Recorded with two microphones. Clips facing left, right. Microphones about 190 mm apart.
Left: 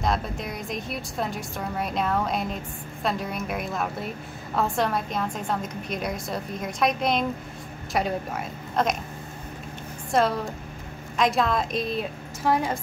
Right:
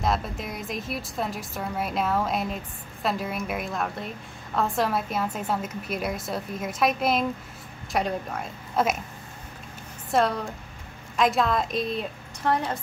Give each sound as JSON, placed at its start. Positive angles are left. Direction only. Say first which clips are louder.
{"t": 0.0, "sound": "a woman's voice", "louder": "even", "side_deg": 0}
{"t": 10.1, "sound": "a woman's voice", "louder": "left 1 dB", "side_deg": 0}